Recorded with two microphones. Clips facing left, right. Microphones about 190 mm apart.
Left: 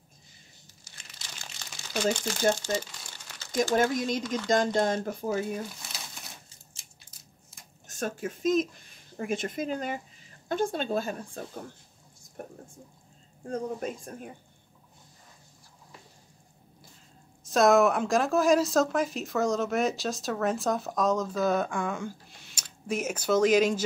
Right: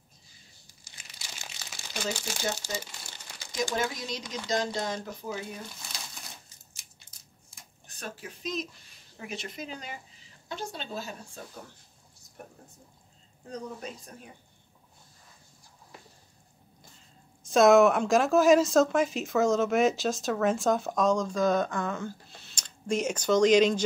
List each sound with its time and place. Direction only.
1.0 s crumpling: 5° right (ahead or behind)
2.5 s crumpling: 5° right (ahead or behind)
3.7 s speech: 50° left (ahead or behind)
5.8 s crumpling: centre (ahead or behind)
7.8 s speech: 45° left (ahead or behind)
13.5 s speech: 50° left (ahead or behind)
17.4 s a woman's voice: centre (ahead or behind)